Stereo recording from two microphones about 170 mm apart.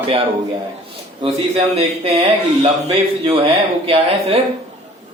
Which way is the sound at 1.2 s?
35° right (ahead or behind).